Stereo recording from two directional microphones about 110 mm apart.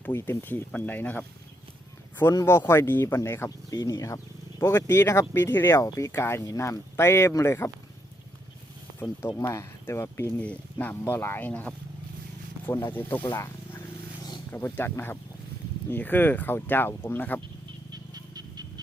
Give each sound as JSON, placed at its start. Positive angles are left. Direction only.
{"t": 0.0, "sound": "speech", "side_deg": 25}
{"t": 2.3, "sound": "speech", "side_deg": 25}
{"t": 9.0, "sound": "speech", "side_deg": 20}
{"t": 13.2, "sound": "wild animals", "side_deg": 25}
{"t": 14.5, "sound": "speech", "side_deg": 20}
{"t": 17.9, "sound": "music", "side_deg": -35}